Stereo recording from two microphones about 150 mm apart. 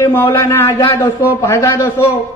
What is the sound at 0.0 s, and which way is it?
A man's voice, 15° left (ahead or behind).